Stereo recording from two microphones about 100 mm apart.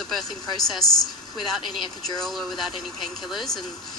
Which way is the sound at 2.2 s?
Centre (ahead or behind).